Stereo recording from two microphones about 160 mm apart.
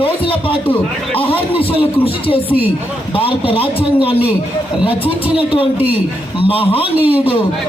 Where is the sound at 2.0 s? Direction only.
35° left (ahead or behind).